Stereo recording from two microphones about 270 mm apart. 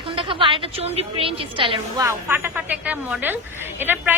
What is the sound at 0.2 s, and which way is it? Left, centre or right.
A woman's voice, centre.